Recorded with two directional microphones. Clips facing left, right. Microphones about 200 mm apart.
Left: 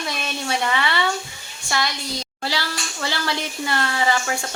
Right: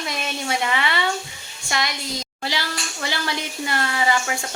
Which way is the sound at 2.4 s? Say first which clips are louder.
Left 1 dB; 20° right (ahead or behind).